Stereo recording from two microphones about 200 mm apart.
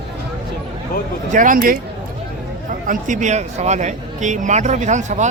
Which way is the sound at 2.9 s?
40° right (ahead or behind).